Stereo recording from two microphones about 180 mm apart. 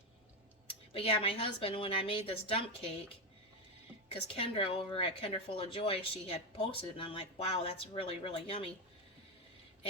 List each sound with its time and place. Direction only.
0.9 s speech: 30° left (ahead or behind)
4.1 s speech: 30° left (ahead or behind)